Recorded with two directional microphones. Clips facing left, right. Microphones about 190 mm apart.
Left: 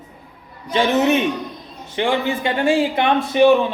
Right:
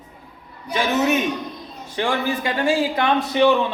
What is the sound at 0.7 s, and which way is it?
A man's voice, 25° left (ahead or behind).